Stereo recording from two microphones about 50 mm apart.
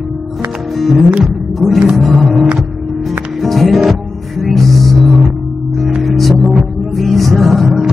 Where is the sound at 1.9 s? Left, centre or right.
Centre.